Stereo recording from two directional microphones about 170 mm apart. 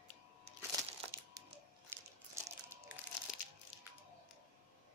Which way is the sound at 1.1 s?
15° right (ahead or behind).